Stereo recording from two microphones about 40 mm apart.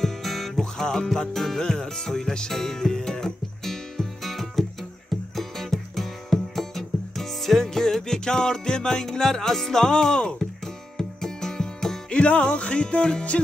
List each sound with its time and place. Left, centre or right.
0.0 s music: centre
12.1 s music: left